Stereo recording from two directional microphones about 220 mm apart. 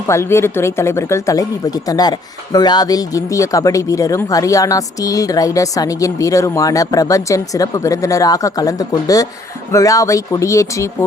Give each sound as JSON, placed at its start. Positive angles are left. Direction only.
{"t": 0.1, "sound": "speech", "side_deg": 10}